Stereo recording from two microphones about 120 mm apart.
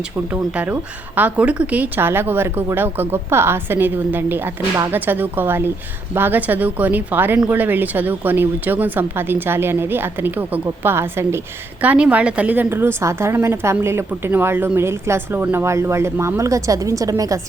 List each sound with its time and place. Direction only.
0.5 s a woman's voice: 15° right (ahead or behind)